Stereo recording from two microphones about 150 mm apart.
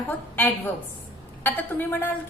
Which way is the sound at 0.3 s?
15° left (ahead or behind).